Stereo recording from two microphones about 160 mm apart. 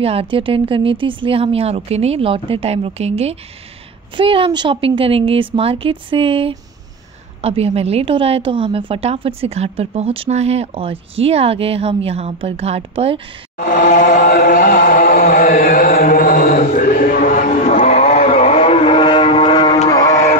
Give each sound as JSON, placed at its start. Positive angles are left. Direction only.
{"t": 0.0, "sound": "a woman's voice", "side_deg": -35}
{"t": 13.6, "sound": "chant", "side_deg": 55}